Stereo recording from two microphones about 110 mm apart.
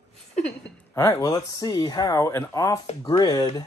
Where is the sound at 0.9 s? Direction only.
30° left (ahead or behind).